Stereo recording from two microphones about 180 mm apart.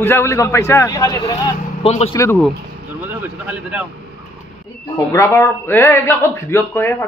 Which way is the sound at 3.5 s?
5° right (ahead or behind).